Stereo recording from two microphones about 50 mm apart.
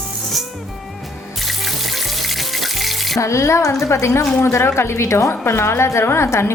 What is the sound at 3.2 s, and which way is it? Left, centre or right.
A woman's voice, left.